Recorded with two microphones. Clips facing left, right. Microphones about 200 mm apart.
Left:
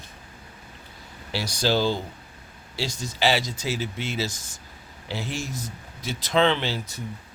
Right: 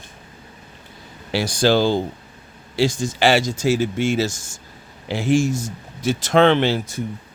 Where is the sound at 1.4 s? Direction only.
50° right (ahead or behind).